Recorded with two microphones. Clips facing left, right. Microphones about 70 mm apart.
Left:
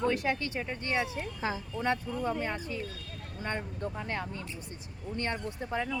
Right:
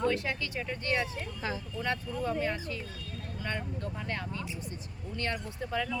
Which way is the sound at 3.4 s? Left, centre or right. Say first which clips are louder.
Left 2 dB; left.